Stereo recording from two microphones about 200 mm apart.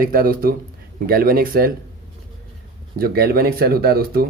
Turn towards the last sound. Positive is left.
turn(degrees=-50)  # may be behind; listen again after turning